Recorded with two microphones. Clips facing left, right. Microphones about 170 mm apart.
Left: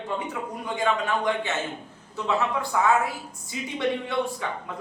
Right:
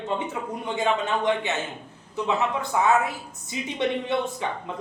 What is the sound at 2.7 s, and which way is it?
A woman's voice, 20° right (ahead or behind).